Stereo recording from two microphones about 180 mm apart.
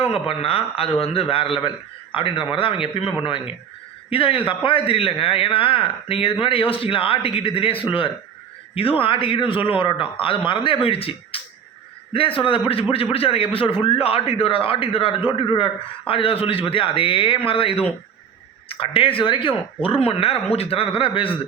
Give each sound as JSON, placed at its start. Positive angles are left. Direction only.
{"t": 0.1, "sound": "a man's voice", "side_deg": 30}